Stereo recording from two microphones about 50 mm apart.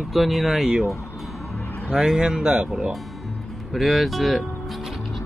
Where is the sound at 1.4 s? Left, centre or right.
Left.